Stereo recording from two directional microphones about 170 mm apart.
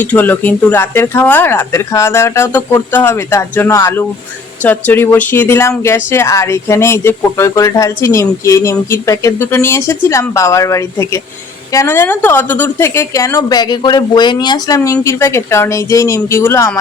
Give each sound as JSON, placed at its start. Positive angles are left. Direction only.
{"t": 0.0, "sound": "speech", "side_deg": 10}